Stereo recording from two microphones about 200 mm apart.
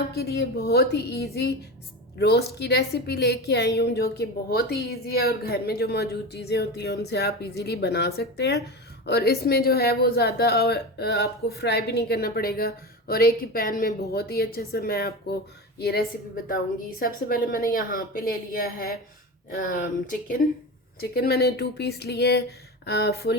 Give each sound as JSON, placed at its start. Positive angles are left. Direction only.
{"t": 0.1, "sound": "a woman's voice", "side_deg": 55}